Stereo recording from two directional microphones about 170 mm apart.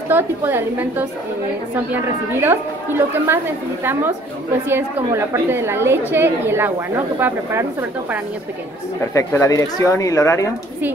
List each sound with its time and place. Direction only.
0.1 s a woman's voice: 10° right (ahead or behind)
4.6 s a woman's voice: 15° right (ahead or behind)
9.1 s speech: 20° left (ahead or behind)